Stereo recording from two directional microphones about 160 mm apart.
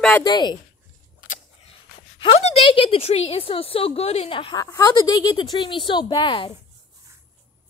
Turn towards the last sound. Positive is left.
turn(degrees=30)  # may be behind; listen again after turning